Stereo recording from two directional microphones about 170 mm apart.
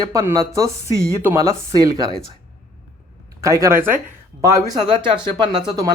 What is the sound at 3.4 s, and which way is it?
Speech, 20° right (ahead or behind).